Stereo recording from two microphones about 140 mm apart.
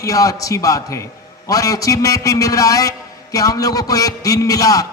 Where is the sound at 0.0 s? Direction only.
25° left (ahead or behind).